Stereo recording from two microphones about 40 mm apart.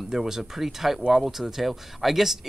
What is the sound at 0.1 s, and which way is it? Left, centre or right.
Speech, centre.